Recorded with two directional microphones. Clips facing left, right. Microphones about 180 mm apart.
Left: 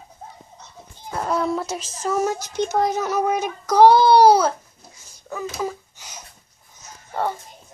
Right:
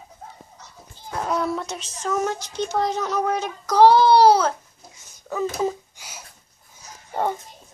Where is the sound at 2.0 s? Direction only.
5° left (ahead or behind).